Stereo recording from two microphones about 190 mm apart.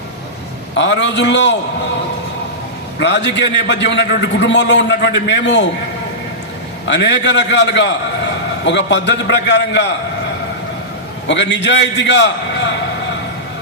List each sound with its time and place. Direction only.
0.8 s a man's voice: 70° left (ahead or behind)
3.0 s a man's voice: 65° left (ahead or behind)
6.8 s a man's voice: 65° left (ahead or behind)
11.3 s a man's voice: 65° left (ahead or behind)